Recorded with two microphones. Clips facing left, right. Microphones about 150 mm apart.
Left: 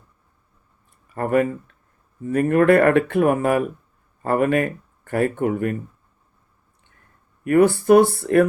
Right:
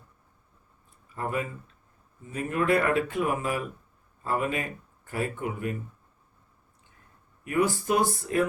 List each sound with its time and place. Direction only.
1.1 s speech: 60° left (ahead or behind)
7.4 s speech: 60° left (ahead or behind)